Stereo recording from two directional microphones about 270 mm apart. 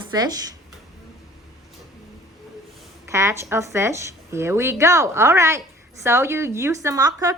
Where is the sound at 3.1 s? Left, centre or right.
Centre.